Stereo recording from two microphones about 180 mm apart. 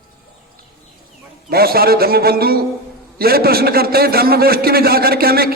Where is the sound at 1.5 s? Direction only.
55° right (ahead or behind).